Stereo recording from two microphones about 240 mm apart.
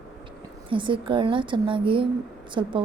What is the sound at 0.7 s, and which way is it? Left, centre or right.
A woman's voice, right.